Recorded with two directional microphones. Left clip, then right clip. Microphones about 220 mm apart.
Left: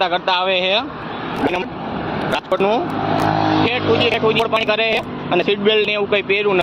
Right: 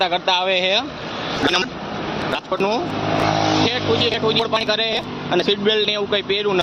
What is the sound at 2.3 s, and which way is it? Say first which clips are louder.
Vehicle: left 4 dB; centre (ahead or behind).